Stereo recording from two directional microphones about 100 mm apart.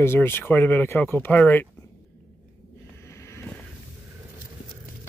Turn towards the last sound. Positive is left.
turn(degrees=25)  # may be behind; listen again after turning